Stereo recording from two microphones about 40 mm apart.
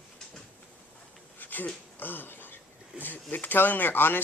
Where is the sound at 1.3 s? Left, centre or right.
Left.